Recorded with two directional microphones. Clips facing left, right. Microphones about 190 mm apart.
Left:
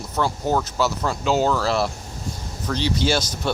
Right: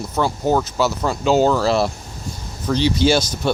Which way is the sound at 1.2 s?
25° right (ahead or behind).